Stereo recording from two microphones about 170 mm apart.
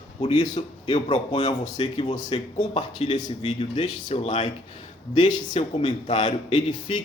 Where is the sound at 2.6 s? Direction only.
40° left (ahead or behind).